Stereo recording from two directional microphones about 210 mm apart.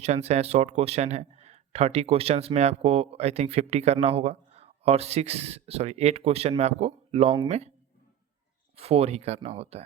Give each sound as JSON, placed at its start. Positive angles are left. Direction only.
{"t": 0.0, "sound": "a man's voice", "side_deg": -30}
{"t": 8.7, "sound": "a man's voice", "side_deg": -30}